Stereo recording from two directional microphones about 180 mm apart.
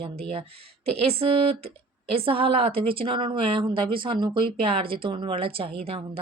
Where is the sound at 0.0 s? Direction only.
30° right (ahead or behind).